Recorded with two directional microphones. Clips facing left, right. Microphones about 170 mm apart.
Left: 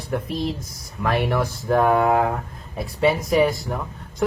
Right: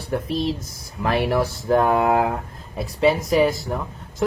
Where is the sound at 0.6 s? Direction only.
25° right (ahead or behind).